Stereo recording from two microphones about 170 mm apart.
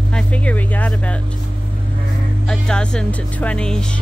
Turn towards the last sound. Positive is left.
turn(degrees=5)  # may be behind; listen again after turning